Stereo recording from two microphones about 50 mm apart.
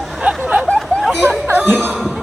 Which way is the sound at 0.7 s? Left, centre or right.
Centre.